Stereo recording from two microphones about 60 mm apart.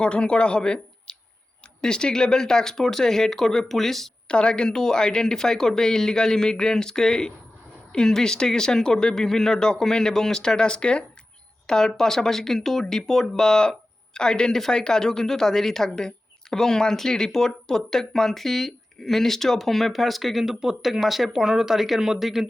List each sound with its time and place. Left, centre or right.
0.0 s speech: centre
4.3 s speech: centre